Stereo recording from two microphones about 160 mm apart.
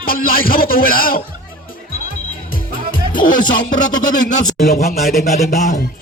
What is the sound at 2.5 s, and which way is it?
Music, 60° left (ahead or behind).